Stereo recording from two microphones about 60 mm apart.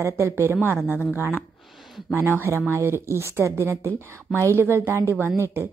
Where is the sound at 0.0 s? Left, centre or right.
Right.